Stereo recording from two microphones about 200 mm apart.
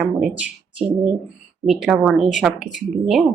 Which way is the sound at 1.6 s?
Centre (ahead or behind).